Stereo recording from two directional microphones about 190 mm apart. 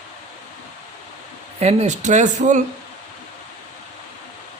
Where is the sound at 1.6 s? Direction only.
35° right (ahead or behind).